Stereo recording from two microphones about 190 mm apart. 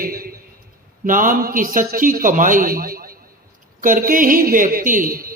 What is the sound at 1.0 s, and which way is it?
A man's voice, 45° right (ahead or behind).